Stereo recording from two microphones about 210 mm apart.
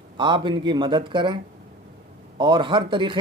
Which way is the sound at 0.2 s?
20° right (ahead or behind).